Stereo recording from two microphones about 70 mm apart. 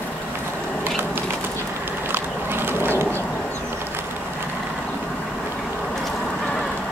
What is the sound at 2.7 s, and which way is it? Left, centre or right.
Bird, right.